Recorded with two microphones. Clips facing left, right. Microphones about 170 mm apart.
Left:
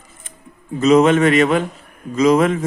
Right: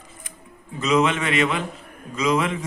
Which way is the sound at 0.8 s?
45° left (ahead or behind).